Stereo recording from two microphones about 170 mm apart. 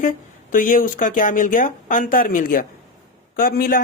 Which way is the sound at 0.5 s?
55° left (ahead or behind).